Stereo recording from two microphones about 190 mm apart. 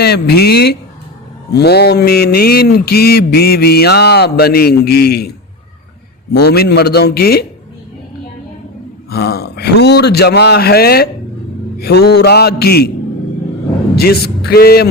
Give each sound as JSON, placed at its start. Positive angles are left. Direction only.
{"t": 0.0, "sound": "mantra", "side_deg": 60}
{"t": 6.3, "sound": "mantra", "side_deg": 55}
{"t": 9.0, "sound": "mantra", "side_deg": 55}
{"t": 13.9, "sound": "mantra", "side_deg": 55}